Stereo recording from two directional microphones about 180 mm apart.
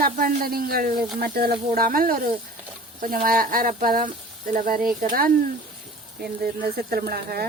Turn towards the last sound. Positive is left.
turn(degrees=-55)  # may be behind; listen again after turning